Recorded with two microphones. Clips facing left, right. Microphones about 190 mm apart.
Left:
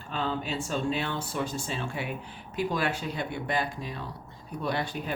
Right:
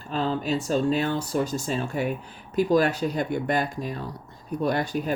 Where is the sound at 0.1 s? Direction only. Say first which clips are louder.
Right 6 dB; 40° right (ahead or behind).